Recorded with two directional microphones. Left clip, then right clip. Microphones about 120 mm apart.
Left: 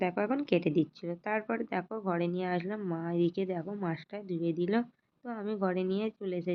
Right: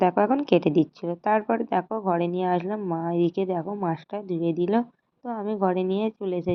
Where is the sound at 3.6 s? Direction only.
5° right (ahead or behind).